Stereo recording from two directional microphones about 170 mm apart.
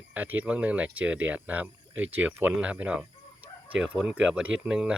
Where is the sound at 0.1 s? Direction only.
10° right (ahead or behind).